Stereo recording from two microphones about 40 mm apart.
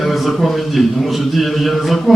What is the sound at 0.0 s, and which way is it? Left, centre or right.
A man's voice, centre.